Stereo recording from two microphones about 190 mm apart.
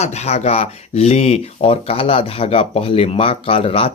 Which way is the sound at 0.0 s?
35° left (ahead or behind).